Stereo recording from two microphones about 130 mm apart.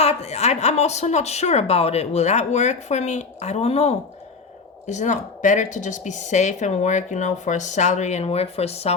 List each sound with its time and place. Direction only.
0.0 s a woman's voice: 55° left (ahead or behind)
4.9 s a woman's voice: 65° left (ahead or behind)